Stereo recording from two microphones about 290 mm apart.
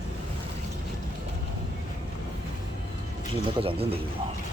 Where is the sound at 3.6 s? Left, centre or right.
Centre.